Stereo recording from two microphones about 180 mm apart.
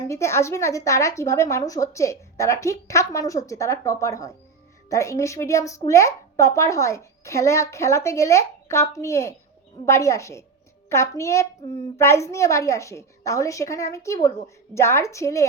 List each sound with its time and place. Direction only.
0.1 s a child's voice: 15° left (ahead or behind)